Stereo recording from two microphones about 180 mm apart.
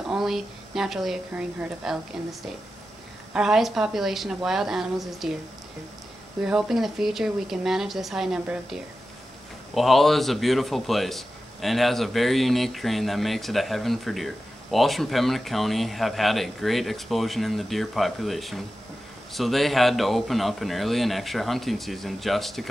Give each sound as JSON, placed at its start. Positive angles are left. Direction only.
{"t": 0.1, "sound": "speech", "side_deg": 0}
{"t": 3.3, "sound": "a man's voice", "side_deg": 0}
{"t": 6.4, "sound": "a man's voice", "side_deg": -5}